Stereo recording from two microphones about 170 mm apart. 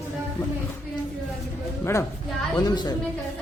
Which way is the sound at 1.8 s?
15° left (ahead or behind).